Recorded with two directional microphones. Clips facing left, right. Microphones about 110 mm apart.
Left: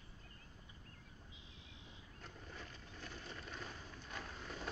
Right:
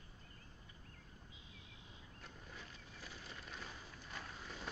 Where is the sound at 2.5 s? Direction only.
5° right (ahead or behind).